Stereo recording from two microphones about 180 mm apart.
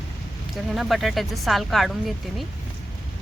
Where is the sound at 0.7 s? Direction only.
Centre (ahead or behind).